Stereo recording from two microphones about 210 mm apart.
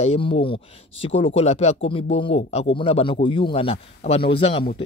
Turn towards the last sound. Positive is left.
turn(degrees=25)  # may be behind; listen again after turning